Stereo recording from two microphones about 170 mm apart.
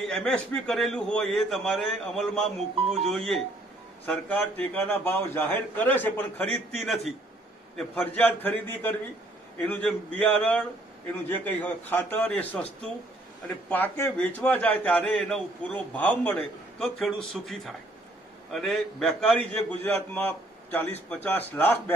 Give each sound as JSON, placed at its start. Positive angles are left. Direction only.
{"t": 0.1, "sound": "a man's voice", "side_deg": 5}
{"t": 13.7, "sound": "a man's voice", "side_deg": 10}